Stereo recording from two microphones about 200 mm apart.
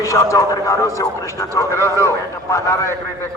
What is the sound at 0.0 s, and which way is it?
A man's voice, 15° left (ahead or behind).